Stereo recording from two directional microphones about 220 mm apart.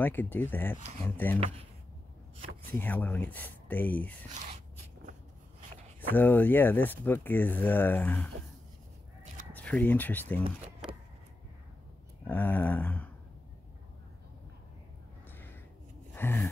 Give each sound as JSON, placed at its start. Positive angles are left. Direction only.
{"t": 0.0, "sound": "speech", "side_deg": 10}
{"t": 2.6, "sound": "speech", "side_deg": 10}
{"t": 5.9, "sound": "speech", "side_deg": 10}
{"t": 9.5, "sound": "speech", "side_deg": 5}
{"t": 12.3, "sound": "speech", "side_deg": 10}
{"t": 16.2, "sound": "gasp", "side_deg": 10}